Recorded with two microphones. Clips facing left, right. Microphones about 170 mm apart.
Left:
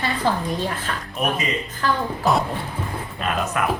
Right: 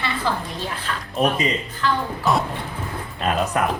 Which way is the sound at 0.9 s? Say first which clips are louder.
Right 3 dB; 40° left (ahead or behind).